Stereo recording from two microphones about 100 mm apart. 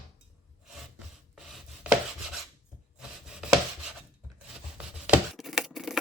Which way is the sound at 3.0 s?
5° right (ahead or behind).